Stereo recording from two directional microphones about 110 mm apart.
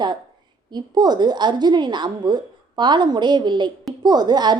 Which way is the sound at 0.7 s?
40° right (ahead or behind).